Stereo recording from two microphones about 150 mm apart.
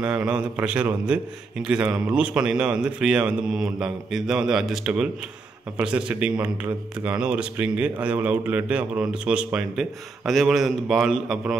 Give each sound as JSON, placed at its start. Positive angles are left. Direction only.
{"t": 0.0, "sound": "a man's voice", "side_deg": -5}